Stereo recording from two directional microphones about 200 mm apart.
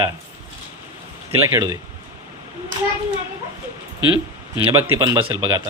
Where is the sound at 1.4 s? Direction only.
15° right (ahead or behind).